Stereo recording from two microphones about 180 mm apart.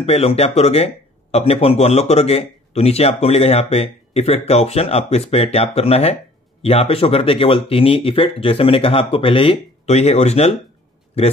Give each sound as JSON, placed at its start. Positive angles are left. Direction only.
{"t": 0.0, "sound": "speech", "side_deg": 35}